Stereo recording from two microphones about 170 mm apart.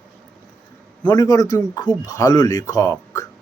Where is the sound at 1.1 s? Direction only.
20° left (ahead or behind).